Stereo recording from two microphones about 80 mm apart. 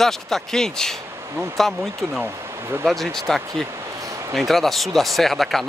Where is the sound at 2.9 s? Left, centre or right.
Centre.